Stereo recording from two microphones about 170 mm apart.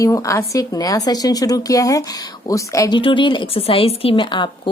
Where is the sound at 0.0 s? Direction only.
20° left (ahead or behind).